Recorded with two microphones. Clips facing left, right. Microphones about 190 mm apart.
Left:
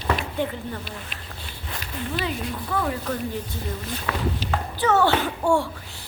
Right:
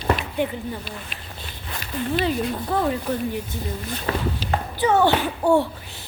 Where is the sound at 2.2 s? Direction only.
30° right (ahead or behind).